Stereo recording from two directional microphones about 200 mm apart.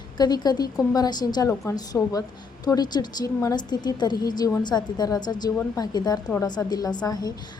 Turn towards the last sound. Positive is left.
turn(degrees=20)  # may be behind; listen again after turning